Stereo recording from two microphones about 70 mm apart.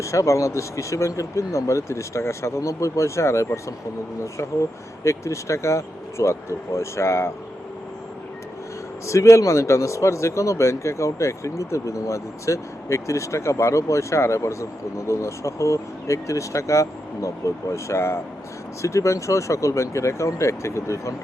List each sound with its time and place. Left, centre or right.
0.0 s speech: left
5.0 s speech: left
9.0 s speech: left